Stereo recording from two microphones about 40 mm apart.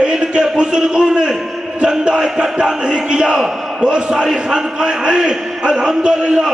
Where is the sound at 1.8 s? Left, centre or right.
Right.